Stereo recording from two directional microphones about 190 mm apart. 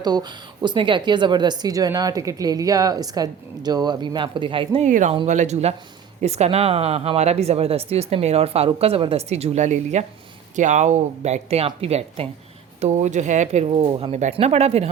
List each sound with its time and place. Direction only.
0.0 s speech: 20° right (ahead or behind)
4.9 s a woman's voice: 45° right (ahead or behind)